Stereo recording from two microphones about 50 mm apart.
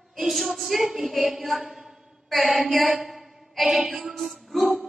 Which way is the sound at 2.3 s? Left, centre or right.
Centre.